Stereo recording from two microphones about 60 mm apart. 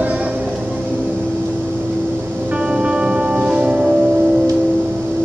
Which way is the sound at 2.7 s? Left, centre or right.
Centre.